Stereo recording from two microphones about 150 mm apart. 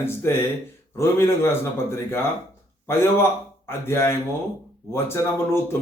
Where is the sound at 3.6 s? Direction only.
15° left (ahead or behind).